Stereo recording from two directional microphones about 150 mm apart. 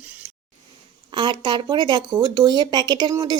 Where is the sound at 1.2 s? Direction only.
30° right (ahead or behind).